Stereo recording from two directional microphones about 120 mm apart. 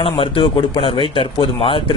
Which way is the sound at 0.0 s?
50° left (ahead or behind).